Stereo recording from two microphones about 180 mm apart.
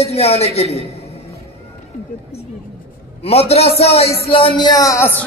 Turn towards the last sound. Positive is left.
turn(degrees=15)  # may be behind; listen again after turning